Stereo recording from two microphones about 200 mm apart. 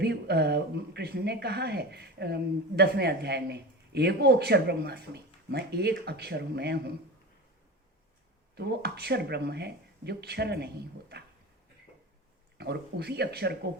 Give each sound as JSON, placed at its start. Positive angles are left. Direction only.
{"t": 0.0, "sound": "speech", "side_deg": -55}
{"t": 8.5, "sound": "speech", "side_deg": -55}
{"t": 12.5, "sound": "speech", "side_deg": -55}